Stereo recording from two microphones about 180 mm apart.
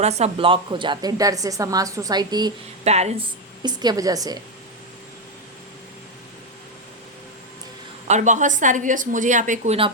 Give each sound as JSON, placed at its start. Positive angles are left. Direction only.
{"t": 0.0, "sound": "a woman's voice", "side_deg": -35}
{"t": 2.8, "sound": "a woman's voice", "side_deg": -35}
{"t": 3.6, "sound": "a woman's voice", "side_deg": -25}
{"t": 8.0, "sound": "a woman's voice", "side_deg": -40}